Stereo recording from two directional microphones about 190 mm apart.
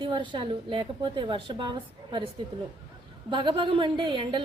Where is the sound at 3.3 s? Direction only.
25° right (ahead or behind).